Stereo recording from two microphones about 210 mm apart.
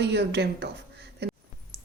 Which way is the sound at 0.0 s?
55° right (ahead or behind).